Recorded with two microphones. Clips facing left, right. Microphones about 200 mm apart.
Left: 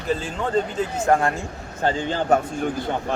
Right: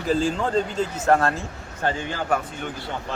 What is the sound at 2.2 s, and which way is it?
Speech, 40° left (ahead or behind).